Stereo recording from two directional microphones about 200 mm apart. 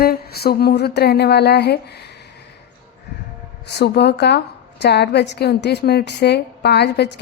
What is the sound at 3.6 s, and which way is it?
A woman's voice, 55° left (ahead or behind).